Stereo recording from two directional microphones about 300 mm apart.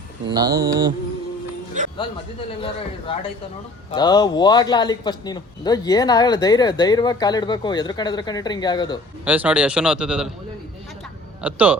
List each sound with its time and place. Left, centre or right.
0.3 s mantra: centre
1.8 s music: right
3.1 s speech: centre
9.2 s a man's voice: centre
11.4 s a man's voice: centre